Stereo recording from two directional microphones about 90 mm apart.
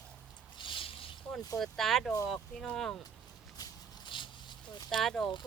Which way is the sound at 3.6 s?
65° left (ahead or behind).